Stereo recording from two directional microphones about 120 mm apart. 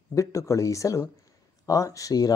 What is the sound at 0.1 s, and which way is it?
Speech, 25° left (ahead or behind).